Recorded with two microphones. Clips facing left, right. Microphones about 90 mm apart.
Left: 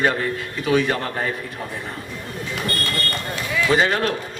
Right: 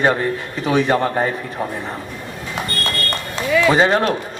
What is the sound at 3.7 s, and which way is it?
Speech, 30° right (ahead or behind).